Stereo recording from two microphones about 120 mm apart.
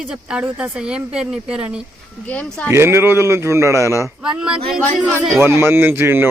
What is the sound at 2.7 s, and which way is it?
Speech, 20° right (ahead or behind).